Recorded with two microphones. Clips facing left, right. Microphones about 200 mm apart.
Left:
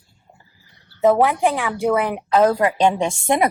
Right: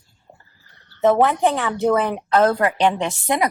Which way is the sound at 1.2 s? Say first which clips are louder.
Even; 10° left (ahead or behind).